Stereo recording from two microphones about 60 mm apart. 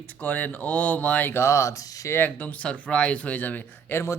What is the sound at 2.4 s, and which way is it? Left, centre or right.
Speech, left.